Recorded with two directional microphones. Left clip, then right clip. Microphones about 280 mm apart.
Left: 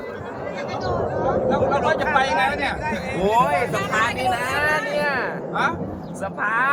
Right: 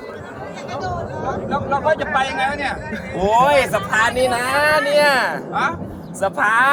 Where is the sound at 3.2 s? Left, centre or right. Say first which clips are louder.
Right 5 dB; right.